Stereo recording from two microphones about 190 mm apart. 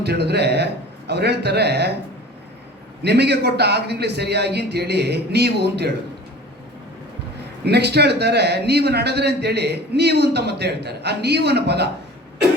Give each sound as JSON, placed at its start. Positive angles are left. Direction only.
{"t": 0.0, "sound": "a man's voice", "side_deg": -60}
{"t": 3.0, "sound": "a man's voice", "side_deg": -60}
{"t": 7.6, "sound": "a man's voice", "side_deg": -60}